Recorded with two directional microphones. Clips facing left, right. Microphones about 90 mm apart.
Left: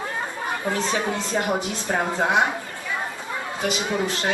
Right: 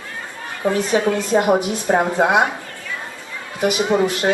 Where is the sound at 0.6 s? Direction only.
20° right (ahead or behind).